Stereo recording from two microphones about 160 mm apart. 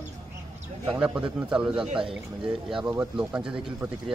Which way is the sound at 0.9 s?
5° right (ahead or behind).